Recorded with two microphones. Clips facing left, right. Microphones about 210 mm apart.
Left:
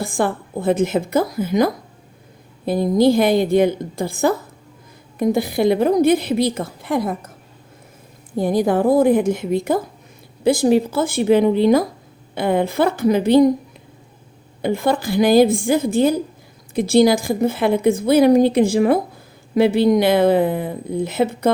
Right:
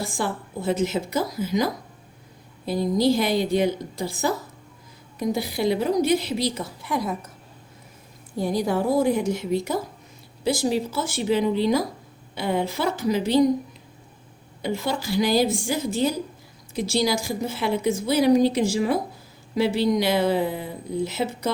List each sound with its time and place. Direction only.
0.0 s a woman's voice: 55° left (ahead or behind)
8.4 s a woman's voice: 55° left (ahead or behind)
14.6 s a woman's voice: 55° left (ahead or behind)